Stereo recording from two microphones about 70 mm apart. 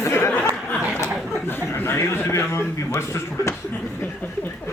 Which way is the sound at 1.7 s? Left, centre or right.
Left.